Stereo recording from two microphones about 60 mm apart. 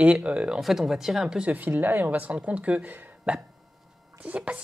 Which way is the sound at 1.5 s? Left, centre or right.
Right.